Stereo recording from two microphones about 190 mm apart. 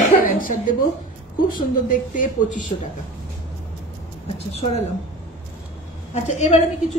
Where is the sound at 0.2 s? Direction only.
45° left (ahead or behind).